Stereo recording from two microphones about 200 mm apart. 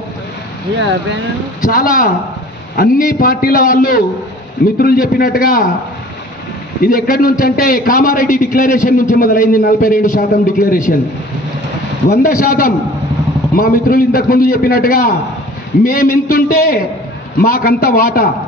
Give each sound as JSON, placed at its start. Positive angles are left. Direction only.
{"t": 1.6, "sound": "a man's voice", "side_deg": 45}
{"t": 6.8, "sound": "a man's voice", "side_deg": 45}
{"t": 12.1, "sound": "a man's voice", "side_deg": 45}